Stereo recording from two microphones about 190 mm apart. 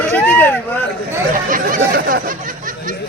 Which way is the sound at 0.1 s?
10° left (ahead or behind).